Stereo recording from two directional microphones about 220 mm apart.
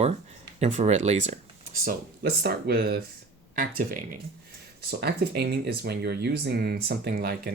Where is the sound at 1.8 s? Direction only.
45° right (ahead or behind).